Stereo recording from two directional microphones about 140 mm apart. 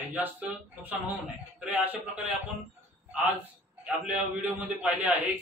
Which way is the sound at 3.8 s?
10° right (ahead or behind).